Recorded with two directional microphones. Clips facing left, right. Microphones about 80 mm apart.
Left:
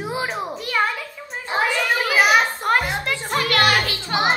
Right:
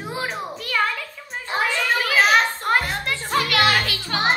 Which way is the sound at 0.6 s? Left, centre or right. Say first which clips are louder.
Even; left.